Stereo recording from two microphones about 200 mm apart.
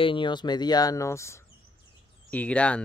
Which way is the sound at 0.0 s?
25° left (ahead or behind).